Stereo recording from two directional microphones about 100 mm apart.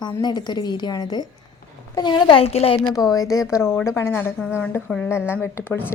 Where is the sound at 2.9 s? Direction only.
35° left (ahead or behind).